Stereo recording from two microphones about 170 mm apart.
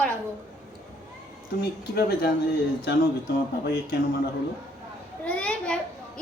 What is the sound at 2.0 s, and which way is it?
Speech, 70° left (ahead or behind).